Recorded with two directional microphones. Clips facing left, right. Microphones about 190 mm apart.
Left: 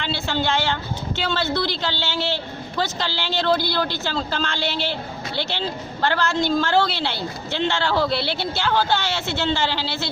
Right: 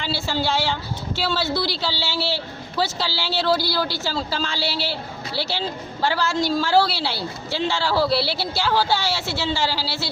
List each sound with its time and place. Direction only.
0.0 s a woman's voice: 5° right (ahead or behind)